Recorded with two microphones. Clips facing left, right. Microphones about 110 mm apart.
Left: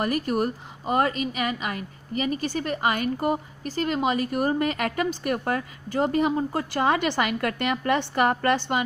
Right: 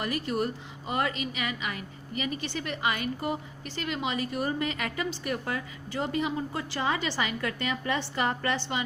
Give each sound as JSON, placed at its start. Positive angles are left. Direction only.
{"t": 0.0, "sound": "a woman's voice", "side_deg": 45}